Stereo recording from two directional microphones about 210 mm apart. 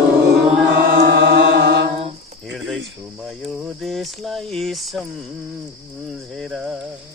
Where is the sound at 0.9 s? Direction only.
50° right (ahead or behind).